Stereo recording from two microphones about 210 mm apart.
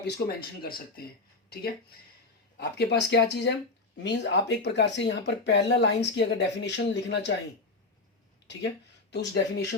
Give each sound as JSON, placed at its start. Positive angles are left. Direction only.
{"t": 0.0, "sound": "speech", "side_deg": 50}
{"t": 2.6, "sound": "speech", "side_deg": 50}
{"t": 8.4, "sound": "speech", "side_deg": 55}